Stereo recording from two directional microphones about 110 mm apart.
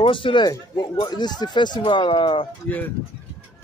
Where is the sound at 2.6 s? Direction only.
15° left (ahead or behind).